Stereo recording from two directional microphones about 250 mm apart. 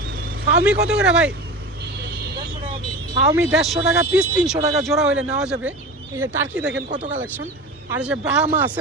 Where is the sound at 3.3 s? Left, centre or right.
Centre.